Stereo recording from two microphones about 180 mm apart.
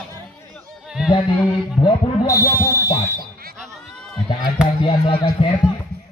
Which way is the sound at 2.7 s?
15° left (ahead or behind).